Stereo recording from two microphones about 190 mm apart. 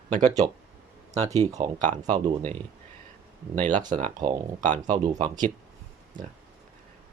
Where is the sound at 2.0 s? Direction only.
20° right (ahead or behind).